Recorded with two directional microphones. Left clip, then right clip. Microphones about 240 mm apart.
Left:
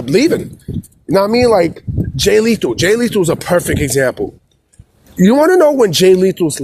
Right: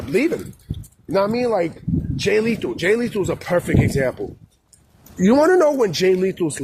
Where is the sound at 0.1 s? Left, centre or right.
Left.